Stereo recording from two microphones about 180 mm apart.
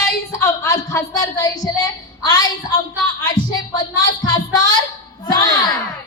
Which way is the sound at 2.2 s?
25° left (ahead or behind).